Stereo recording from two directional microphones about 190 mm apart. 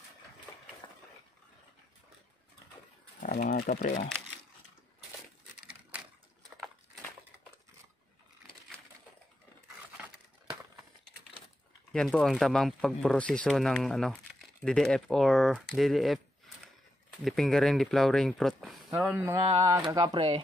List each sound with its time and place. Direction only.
3.2 s speech: 45° left (ahead or behind)
5.9 s a sound: 10° right (ahead or behind)
10.0 s a sound: 5° right (ahead or behind)
11.9 s speech: 5° left (ahead or behind)
17.2 s speech: centre (ahead or behind)
19.3 s speech: 20° right (ahead or behind)